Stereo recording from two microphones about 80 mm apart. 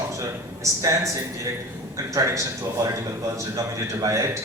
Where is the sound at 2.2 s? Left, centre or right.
Right.